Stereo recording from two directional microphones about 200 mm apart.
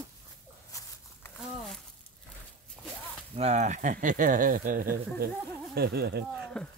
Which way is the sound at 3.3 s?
35° right (ahead or behind).